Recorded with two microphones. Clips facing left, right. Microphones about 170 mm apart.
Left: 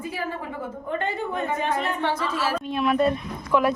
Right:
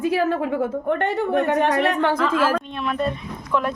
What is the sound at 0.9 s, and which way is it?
A woman's voice, 70° right (ahead or behind).